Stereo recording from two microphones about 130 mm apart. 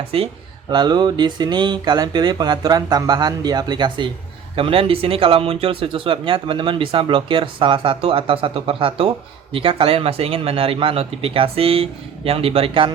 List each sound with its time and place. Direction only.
0.1 s speech: 45° right (ahead or behind)
0.7 s speech: 35° right (ahead or behind)